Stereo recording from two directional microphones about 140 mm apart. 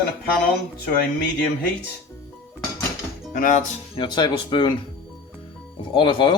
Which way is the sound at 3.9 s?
35° left (ahead or behind).